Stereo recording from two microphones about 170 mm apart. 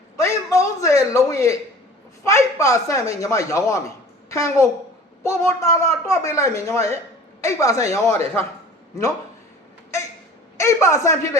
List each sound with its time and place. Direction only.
0.2 s a sound: 15° left (ahead or behind)
2.2 s speech: 20° left (ahead or behind)
10.6 s speech: 15° left (ahead or behind)